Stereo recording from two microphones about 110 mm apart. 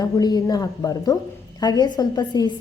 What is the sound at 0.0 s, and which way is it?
A woman's voice, 35° left (ahead or behind).